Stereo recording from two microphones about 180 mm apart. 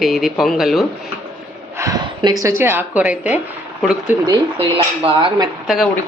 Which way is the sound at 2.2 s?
20° right (ahead or behind).